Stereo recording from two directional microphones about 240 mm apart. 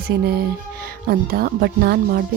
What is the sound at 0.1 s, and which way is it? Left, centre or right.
A woman's voice, right.